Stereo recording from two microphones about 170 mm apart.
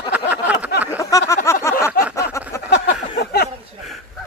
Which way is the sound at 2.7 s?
70° left (ahead or behind).